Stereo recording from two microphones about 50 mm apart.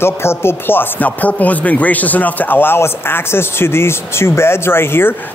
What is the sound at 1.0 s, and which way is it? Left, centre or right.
Speech, left.